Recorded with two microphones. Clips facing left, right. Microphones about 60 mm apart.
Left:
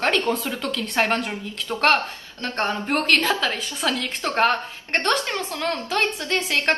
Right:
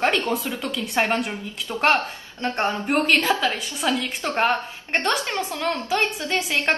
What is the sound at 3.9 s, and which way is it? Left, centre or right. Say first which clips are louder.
Speech: right 1 dB; right.